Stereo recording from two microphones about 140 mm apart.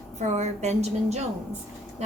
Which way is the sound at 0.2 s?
55° right (ahead or behind).